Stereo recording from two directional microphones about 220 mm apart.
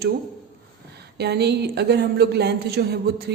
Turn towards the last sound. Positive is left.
turn(degrees=-45)  # may be behind; listen again after turning